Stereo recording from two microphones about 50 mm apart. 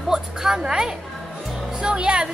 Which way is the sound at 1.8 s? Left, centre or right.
Centre.